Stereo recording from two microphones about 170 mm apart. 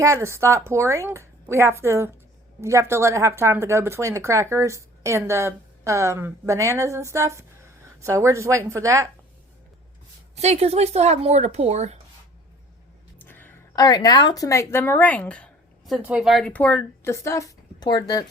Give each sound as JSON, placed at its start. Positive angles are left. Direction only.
{"t": 0.0, "sound": "speech", "side_deg": -15}
{"t": 10.3, "sound": "speech", "side_deg": -40}
{"t": 13.2, "sound": "a sound", "side_deg": 10}
{"t": 13.8, "sound": "speech", "side_deg": 25}
{"t": 16.0, "sound": "speech", "side_deg": -5}